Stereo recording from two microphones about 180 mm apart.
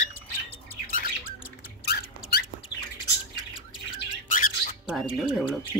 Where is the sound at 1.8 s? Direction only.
65° left (ahead or behind).